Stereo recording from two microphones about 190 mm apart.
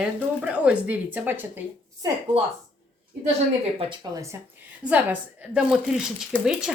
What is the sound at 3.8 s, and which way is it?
Speech, 20° right (ahead or behind).